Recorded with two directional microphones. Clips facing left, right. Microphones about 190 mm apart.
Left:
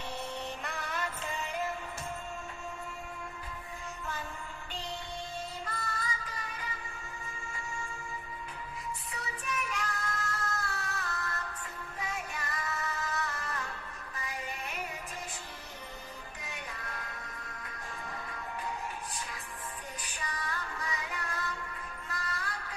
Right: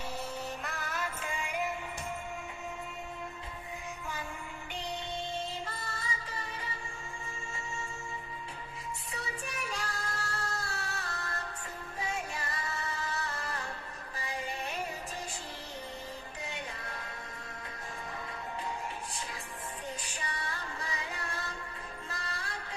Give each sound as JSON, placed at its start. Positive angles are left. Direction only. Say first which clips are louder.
{"t": 0.6, "sound": "music", "louder": "even", "side_deg": 0}
{"t": 5.6, "sound": "music", "louder": "left 2 dB", "side_deg": -30}
{"t": 9.1, "sound": "child singing", "louder": "left 2 dB", "side_deg": -30}
{"t": 11.9, "sound": "music", "louder": "right 2 dB", "side_deg": -30}
{"t": 20.0, "sound": "music", "louder": "even", "side_deg": -30}